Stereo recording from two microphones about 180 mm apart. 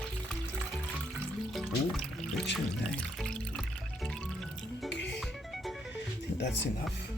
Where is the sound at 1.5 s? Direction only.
Centre (ahead or behind).